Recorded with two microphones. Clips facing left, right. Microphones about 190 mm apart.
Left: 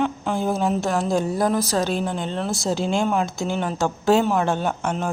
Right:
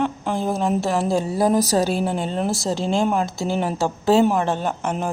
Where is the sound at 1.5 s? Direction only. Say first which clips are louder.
Right 4 dB; 40° right (ahead or behind).